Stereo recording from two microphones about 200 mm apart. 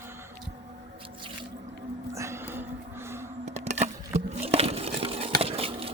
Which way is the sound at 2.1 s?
15° right (ahead or behind).